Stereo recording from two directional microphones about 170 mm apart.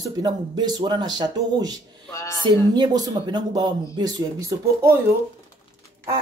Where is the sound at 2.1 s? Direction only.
20° left (ahead or behind).